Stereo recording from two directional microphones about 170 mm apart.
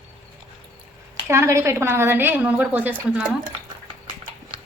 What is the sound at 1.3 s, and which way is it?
A woman's voice, 15° right (ahead or behind).